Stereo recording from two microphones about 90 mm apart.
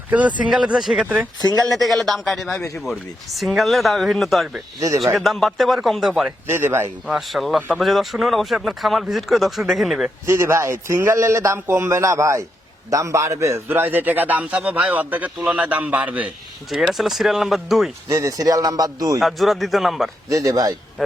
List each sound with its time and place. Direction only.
0.1 s speech: 15° right (ahead or behind)
1.0 s speech: 15° right (ahead or behind)
1.4 s speech: 50° left (ahead or behind)
1.7 s speech: centre (ahead or behind)
6.5 s a man's voice: 25° right (ahead or behind)
7.1 s speech: centre (ahead or behind)
10.2 s a man's voice: 30° right (ahead or behind)
16.6 s speech: centre (ahead or behind)
18.1 s speech: 40° right (ahead or behind)
19.2 s speech: centre (ahead or behind)
20.3 s speech: 40° right (ahead or behind)